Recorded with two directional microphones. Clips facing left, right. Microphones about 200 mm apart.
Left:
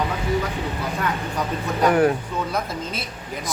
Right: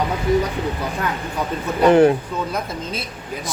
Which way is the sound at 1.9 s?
25° right (ahead or behind).